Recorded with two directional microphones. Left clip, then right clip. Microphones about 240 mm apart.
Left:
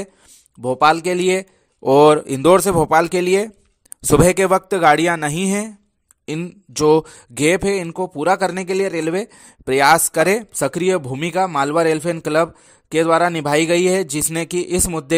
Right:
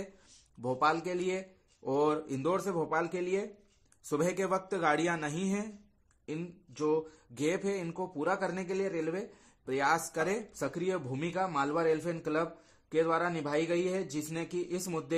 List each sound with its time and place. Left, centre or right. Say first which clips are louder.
0.6 s speech: left 15 dB; left